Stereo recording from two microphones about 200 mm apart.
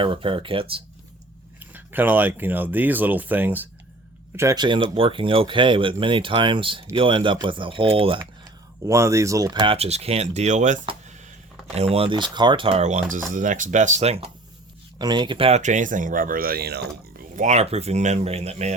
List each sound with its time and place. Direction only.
0.0 s speech: 25° right (ahead or behind)
1.5 s speech: 10° right (ahead or behind); by 8.2 s 25° right (ahead or behind)
8.9 s speech: 15° right (ahead or behind); by 14.3 s 30° right (ahead or behind)
14.9 s speech: 20° right (ahead or behind)